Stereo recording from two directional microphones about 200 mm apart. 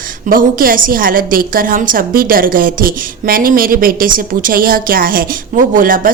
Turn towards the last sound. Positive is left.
turn(degrees=-45)  # may be behind; listen again after turning